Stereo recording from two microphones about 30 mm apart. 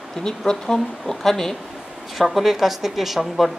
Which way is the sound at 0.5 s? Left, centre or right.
Centre.